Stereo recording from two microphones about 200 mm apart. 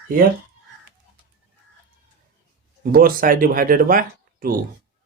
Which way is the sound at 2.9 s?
45° right (ahead or behind).